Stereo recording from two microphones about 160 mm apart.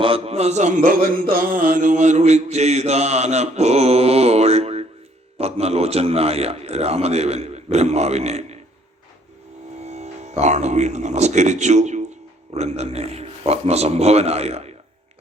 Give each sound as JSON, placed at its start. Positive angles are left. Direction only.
{"t": 0.0, "sound": "a sound", "side_deg": -35}
{"t": 5.4, "sound": "a man's voice", "side_deg": -40}
{"t": 9.8, "sound": "a man's voice", "side_deg": -45}